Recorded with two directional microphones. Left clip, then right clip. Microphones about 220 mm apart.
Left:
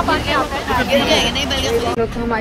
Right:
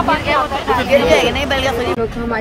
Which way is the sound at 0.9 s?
15° right (ahead or behind).